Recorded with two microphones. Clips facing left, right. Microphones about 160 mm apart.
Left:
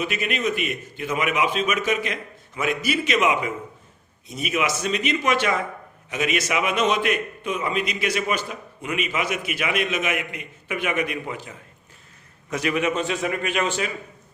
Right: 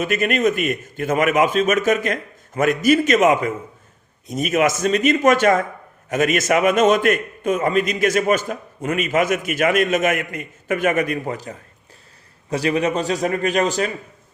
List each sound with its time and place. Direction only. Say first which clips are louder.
0.0 s a man's voice: right 7 dB; 50° right (ahead or behind)